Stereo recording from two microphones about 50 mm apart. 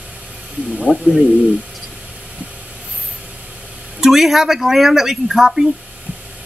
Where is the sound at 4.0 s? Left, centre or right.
Centre.